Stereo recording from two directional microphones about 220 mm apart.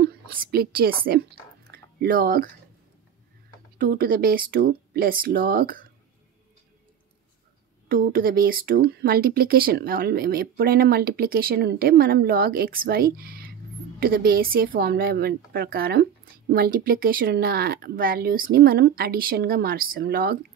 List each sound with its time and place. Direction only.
0.0 s speech: 45° right (ahead or behind)
1.7 s chewing: 45° right (ahead or behind)
3.7 s speech: 40° right (ahead or behind)
7.9 s speech: 40° right (ahead or behind)